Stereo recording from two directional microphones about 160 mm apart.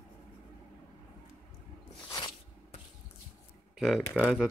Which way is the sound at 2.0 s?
25° left (ahead or behind).